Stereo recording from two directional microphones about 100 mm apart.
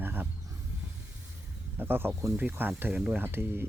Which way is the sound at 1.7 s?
20° right (ahead or behind).